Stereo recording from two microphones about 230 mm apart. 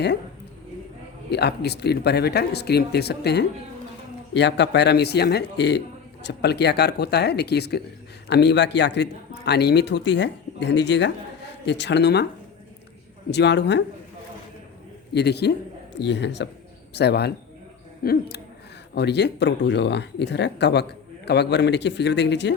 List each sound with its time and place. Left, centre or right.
1.3 s speech: left
13.3 s speech: left
15.1 s speech: left